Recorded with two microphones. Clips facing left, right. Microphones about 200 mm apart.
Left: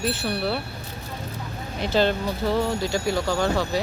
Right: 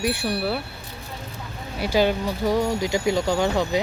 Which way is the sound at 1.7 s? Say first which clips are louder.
Right 1 dB; 10° right (ahead or behind).